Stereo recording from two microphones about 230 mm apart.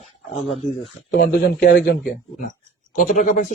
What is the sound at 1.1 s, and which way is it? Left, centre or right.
Speech, left.